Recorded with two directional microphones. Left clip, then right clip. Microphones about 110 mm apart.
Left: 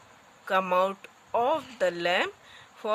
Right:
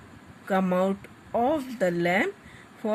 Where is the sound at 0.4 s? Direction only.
65° left (ahead or behind).